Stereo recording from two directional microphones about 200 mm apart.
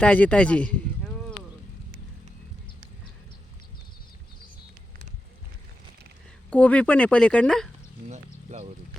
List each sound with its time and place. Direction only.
0.0 s speech: 5° left (ahead or behind)
6.5 s speech: 5° left (ahead or behind)
8.1 s speech: 35° right (ahead or behind)